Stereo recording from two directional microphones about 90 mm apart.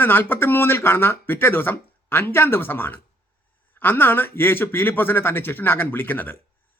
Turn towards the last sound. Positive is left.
turn(degrees=20)  # may be behind; listen again after turning